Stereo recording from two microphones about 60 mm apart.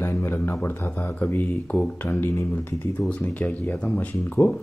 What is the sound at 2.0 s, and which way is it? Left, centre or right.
Speech, left.